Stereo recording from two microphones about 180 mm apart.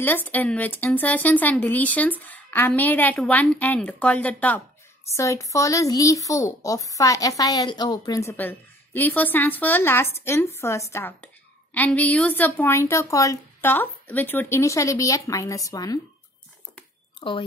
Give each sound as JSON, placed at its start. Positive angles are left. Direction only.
{"t": 0.0, "sound": "a child's voice", "side_deg": 10}
{"t": 17.2, "sound": "speech", "side_deg": 25}